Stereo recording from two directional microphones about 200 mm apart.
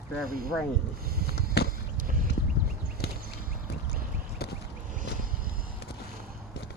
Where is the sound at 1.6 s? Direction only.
55° left (ahead or behind).